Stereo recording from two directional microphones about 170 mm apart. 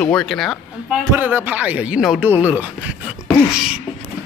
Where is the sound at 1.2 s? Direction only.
10° right (ahead or behind).